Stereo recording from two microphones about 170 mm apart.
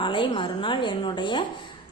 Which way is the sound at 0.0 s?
30° left (ahead or behind).